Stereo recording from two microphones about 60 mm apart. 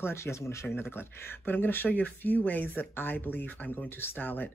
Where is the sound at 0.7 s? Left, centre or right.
Left.